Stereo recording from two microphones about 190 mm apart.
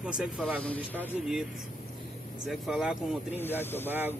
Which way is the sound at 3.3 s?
10° left (ahead or behind).